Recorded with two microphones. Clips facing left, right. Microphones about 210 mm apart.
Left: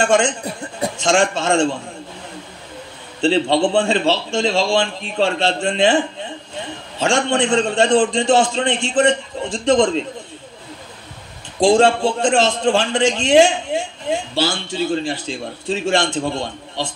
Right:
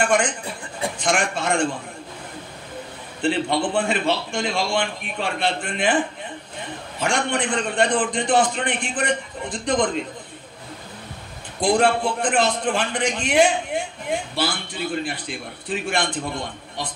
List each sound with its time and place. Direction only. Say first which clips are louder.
0.0 s a man's voice: left 4 dB; 25° left (ahead or behind)
0.5 s a man's voice: left 6 dB; 40° left (ahead or behind)
0.9 s a man's voice: left 7 dB; 25° left (ahead or behind)
3.2 s a man's voice: left 6 dB; 25° left (ahead or behind)
11.6 s a man's voice: left 5 dB; 25° left (ahead or behind)